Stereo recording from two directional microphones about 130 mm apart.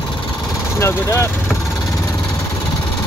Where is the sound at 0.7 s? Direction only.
20° left (ahead or behind).